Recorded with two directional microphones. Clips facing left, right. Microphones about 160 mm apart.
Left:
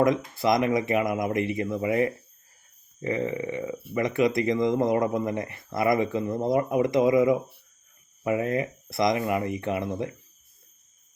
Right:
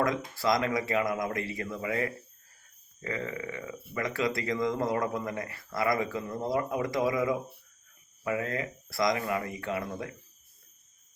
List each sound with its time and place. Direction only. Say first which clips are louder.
0.0 s speech: left 6 dB; 20° left (ahead or behind)